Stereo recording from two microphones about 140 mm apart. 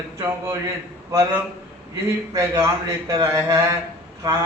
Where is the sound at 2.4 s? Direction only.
25° right (ahead or behind).